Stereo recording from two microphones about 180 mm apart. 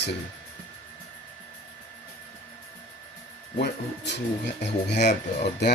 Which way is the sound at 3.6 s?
70° left (ahead or behind).